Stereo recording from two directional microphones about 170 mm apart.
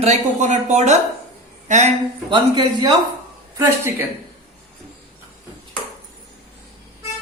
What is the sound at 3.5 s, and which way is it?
Speech, 15° right (ahead or behind).